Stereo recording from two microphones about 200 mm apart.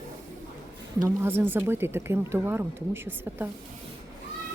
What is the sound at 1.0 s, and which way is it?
Speech, 10° right (ahead or behind).